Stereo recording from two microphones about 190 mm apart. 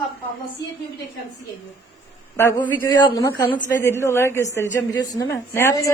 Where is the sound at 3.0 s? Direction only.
20° left (ahead or behind).